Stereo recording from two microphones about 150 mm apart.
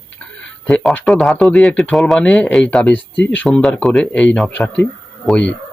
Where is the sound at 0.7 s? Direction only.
5° left (ahead or behind).